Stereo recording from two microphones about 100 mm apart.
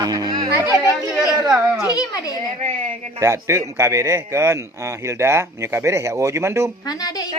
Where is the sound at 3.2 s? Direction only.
30° right (ahead or behind).